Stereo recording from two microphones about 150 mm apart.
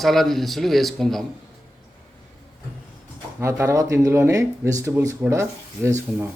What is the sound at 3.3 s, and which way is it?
Speech, 20° right (ahead or behind).